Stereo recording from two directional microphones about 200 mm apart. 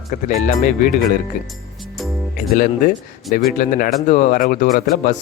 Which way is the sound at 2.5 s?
45° left (ahead or behind).